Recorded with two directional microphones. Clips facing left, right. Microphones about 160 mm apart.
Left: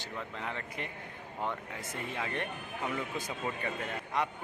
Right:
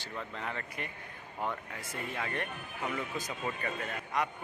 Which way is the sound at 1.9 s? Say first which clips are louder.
Even; 20° left (ahead or behind).